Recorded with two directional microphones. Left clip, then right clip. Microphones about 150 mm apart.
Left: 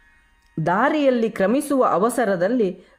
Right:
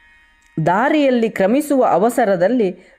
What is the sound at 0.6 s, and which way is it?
Speech, 30° right (ahead or behind).